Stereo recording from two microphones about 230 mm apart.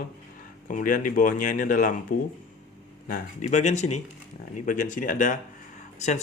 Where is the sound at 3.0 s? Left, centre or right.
Left.